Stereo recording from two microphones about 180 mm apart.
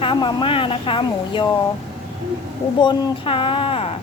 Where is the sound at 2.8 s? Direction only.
25° left (ahead or behind).